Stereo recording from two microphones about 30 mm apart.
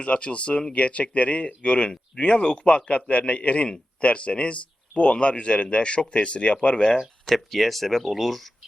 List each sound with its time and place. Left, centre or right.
0.0 s speech: left
7.3 s speech: centre